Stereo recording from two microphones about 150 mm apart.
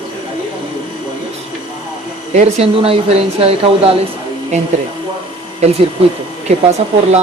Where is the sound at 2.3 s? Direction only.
45° right (ahead or behind).